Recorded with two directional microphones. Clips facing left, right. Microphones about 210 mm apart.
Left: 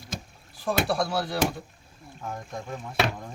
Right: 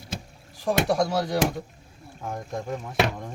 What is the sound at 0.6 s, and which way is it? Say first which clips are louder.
Speech: right 3 dB; 15° right (ahead or behind).